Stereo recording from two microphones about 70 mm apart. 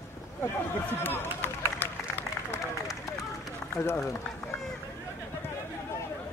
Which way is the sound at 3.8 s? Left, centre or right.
Left.